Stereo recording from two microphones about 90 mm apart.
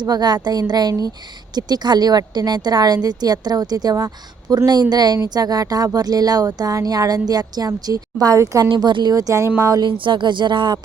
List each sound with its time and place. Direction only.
0.0 s speech: 50° right (ahead or behind)
8.8 s speech: 55° right (ahead or behind)
9.1 s speech: 40° right (ahead or behind)
10.0 s speech: 60° right (ahead or behind)